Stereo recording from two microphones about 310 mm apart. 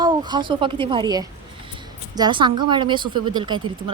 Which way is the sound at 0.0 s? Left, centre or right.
Centre.